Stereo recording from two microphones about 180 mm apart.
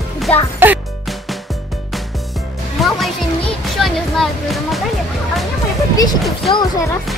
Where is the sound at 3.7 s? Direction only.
Centre (ahead or behind).